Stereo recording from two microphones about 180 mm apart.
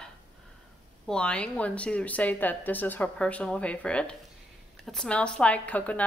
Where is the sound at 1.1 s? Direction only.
5° left (ahead or behind).